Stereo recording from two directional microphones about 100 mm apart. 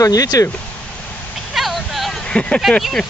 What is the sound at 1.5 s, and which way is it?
Vehicle, centre (ahead or behind).